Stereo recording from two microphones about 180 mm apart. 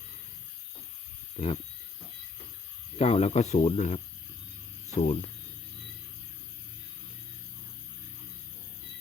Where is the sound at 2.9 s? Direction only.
35° left (ahead or behind).